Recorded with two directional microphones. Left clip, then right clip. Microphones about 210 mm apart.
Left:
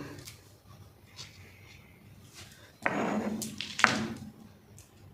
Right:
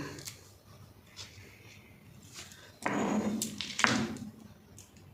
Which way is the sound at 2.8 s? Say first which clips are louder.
Left 1 dB; 15° left (ahead or behind).